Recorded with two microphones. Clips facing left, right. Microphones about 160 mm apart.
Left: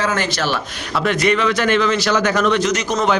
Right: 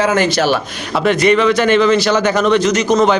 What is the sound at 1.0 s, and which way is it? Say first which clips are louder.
A man's voice: right 5 dB; centre (ahead or behind).